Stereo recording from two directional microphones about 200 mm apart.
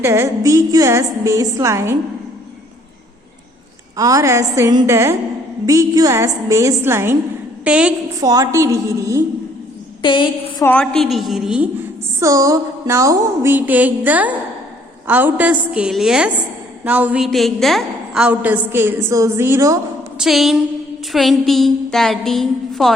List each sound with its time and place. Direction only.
0.0 s a woman's voice: 15° right (ahead or behind)
3.9 s a woman's voice: 15° right (ahead or behind)
8.2 s a woman's voice: 20° right (ahead or behind)
10.0 s a woman's voice: 25° left (ahead or behind)
10.6 s a woman's voice: 5° left (ahead or behind)
12.2 s a woman's voice: 15° right (ahead or behind)
20.1 s a woman's voice: centre (ahead or behind)